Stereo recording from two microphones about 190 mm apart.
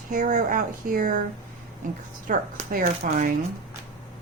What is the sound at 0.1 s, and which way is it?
A woman's voice, 40° right (ahead or behind).